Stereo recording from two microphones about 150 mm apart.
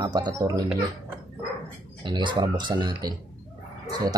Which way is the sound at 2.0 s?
30° right (ahead or behind).